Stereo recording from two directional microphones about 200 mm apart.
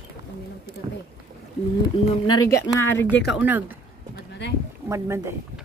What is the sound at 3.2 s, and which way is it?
Speech, 5° right (ahead or behind).